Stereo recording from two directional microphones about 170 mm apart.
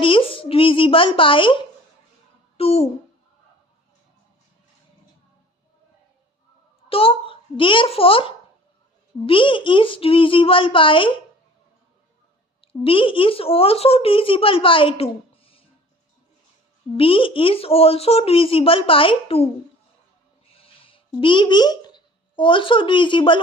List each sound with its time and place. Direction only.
0.0 s speech: 30° left (ahead or behind)
2.6 s speech: 35° left (ahead or behind)
6.9 s speech: 30° left (ahead or behind)
12.6 s speech: 30° left (ahead or behind)
17.0 s speech: 30° left (ahead or behind)
20.6 s speech: 30° left (ahead or behind)